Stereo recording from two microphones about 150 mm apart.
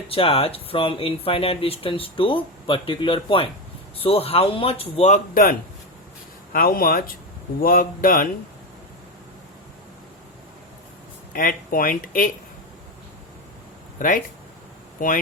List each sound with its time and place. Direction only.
0.1 s speech: 40° left (ahead or behind); by 8.3 s 65° left (ahead or behind)
11.3 s speech: 70° left (ahead or behind)
15.0 s speech: 65° left (ahead or behind)